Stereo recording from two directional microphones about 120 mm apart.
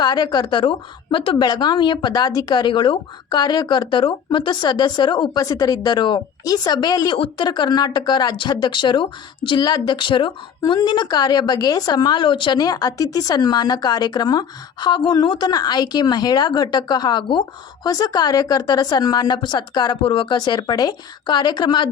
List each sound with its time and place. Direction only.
0.0 s speech: 35° left (ahead or behind)
10.6 s speech: 35° left (ahead or behind)